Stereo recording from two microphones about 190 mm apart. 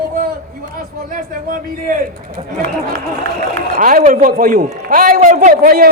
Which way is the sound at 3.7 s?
45° right (ahead or behind).